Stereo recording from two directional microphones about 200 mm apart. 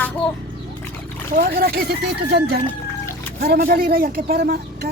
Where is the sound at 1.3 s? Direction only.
45° right (ahead or behind).